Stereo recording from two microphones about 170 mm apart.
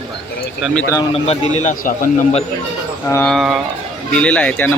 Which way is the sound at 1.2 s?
35° left (ahead or behind).